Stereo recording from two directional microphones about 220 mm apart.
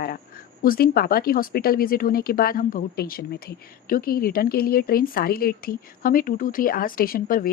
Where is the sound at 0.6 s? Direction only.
40° left (ahead or behind).